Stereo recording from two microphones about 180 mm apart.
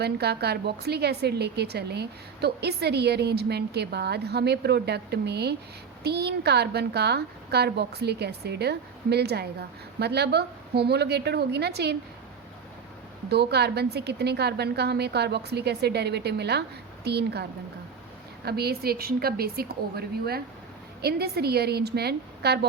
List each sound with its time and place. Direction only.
0.0 s a woman's voice: 65° right (ahead or behind)
13.2 s a woman's voice: 65° right (ahead or behind)
18.4 s a woman's voice: 60° right (ahead or behind)